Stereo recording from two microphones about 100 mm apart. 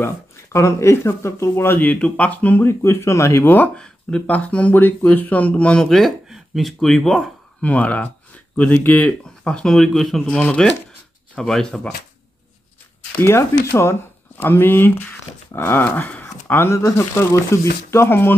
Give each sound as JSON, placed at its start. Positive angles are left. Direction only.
{"t": 0.0, "sound": "speech", "side_deg": 30}
{"t": 2.8, "sound": "speech", "side_deg": 25}
{"t": 7.6, "sound": "speech", "side_deg": 15}
{"t": 10.3, "sound": "speech", "side_deg": 10}
{"t": 13.7, "sound": "speech", "side_deg": 20}